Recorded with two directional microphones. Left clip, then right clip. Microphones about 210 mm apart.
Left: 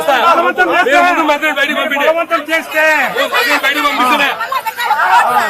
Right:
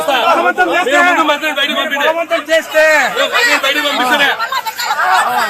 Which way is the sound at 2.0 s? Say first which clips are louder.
Left 2 dB; 35° right (ahead or behind).